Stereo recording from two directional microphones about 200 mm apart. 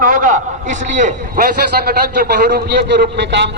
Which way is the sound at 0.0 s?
45° right (ahead or behind).